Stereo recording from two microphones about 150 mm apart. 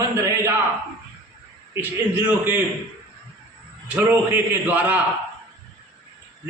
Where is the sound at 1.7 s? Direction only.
15° right (ahead or behind).